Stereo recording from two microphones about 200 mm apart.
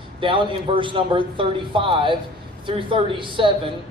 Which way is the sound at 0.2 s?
25° right (ahead or behind).